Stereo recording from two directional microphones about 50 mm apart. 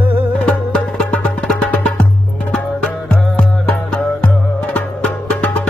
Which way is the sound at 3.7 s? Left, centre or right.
Left.